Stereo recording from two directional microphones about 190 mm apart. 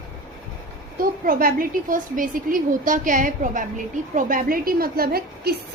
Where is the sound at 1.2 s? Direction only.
50° right (ahead or behind).